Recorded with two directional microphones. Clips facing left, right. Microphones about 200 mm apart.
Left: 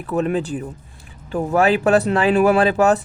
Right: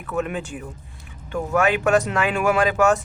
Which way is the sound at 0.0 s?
35° left (ahead or behind).